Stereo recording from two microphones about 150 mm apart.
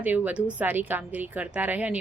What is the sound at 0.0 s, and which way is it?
A woman's voice, 10° right (ahead or behind).